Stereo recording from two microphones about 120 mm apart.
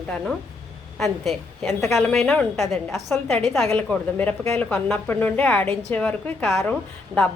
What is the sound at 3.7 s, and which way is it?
A woman's voice, 15° left (ahead or behind).